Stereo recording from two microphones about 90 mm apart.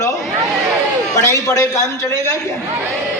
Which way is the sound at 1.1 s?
35° left (ahead or behind).